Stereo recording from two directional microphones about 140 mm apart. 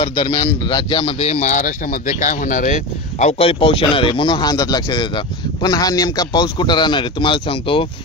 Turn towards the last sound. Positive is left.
turn(degrees=40)  # may be behind; listen again after turning